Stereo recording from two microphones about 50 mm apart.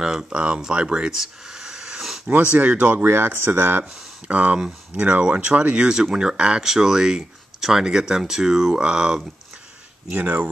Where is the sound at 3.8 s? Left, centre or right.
Centre.